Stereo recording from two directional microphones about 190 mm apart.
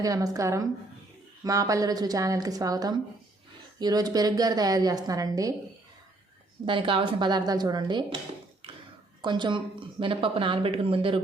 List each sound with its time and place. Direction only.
0.0 s a woman's voice: 20° right (ahead or behind)
6.7 s a woman's voice: 25° right (ahead or behind)
9.2 s a woman's voice: 25° right (ahead or behind)